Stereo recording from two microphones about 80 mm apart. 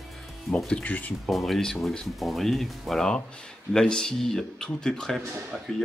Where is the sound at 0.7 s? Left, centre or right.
Centre.